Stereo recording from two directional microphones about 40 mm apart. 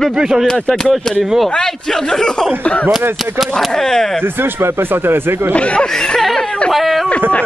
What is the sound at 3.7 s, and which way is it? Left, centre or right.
Speech, centre.